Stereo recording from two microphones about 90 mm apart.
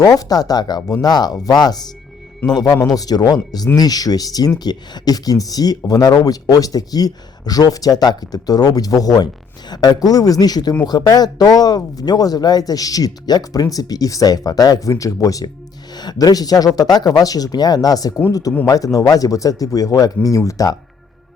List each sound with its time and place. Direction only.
0.0 s speech: 40° left (ahead or behind)